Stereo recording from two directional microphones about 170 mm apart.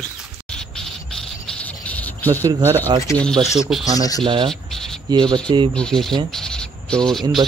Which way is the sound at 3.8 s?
20° left (ahead or behind).